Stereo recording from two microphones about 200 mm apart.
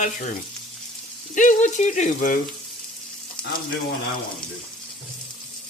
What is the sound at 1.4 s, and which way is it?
A man's voice, 40° left (ahead or behind).